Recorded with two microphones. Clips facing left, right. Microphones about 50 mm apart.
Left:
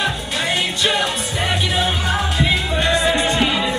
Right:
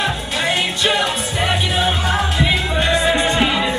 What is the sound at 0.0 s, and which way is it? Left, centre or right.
Music, centre.